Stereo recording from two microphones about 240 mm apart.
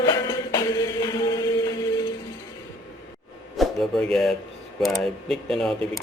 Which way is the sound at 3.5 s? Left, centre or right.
Centre.